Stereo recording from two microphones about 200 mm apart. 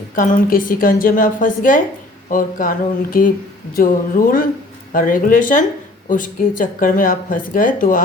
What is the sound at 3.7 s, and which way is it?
Speech, 45° left (ahead or behind).